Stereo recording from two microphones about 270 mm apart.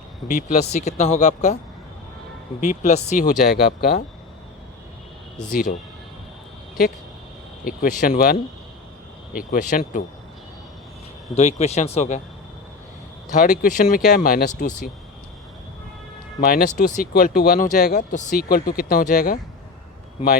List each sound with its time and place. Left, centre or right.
0.3 s speech: left
2.6 s speech: left
5.5 s speech: left
7.6 s speech: left
11.3 s speech: left
13.3 s speech: left
16.4 s speech: left